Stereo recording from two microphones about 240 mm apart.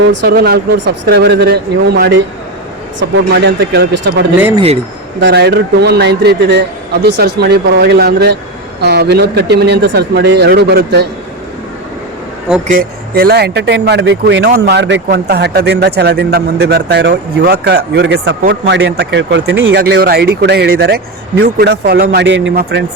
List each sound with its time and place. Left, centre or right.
0.1 s speech: right
4.4 s speech: centre
5.2 s speech: right
13.1 s speech: right